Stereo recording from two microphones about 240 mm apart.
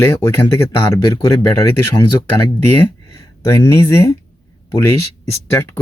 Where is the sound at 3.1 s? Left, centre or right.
Centre.